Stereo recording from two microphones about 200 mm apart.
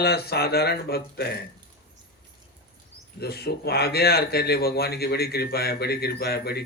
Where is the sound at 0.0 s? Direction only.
50° left (ahead or behind).